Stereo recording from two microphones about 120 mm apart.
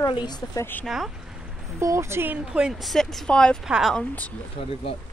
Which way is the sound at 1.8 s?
25° right (ahead or behind).